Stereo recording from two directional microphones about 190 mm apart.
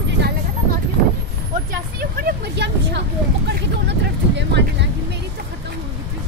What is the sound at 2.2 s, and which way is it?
Vehicle, 60° right (ahead or behind).